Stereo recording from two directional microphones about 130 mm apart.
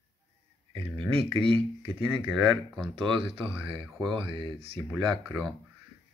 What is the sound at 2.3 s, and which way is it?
Speech, centre (ahead or behind).